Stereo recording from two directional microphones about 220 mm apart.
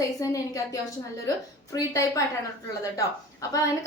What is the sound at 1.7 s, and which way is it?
A woman's voice, 15° left (ahead or behind).